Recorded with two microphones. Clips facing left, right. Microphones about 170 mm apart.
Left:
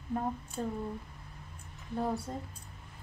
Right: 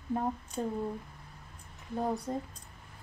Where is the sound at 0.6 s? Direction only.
25° right (ahead or behind).